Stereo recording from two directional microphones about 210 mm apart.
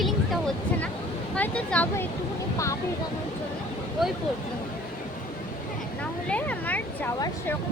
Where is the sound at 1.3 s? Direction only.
5° left (ahead or behind).